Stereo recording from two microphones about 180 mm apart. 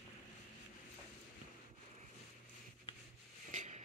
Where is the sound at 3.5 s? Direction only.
45° right (ahead or behind).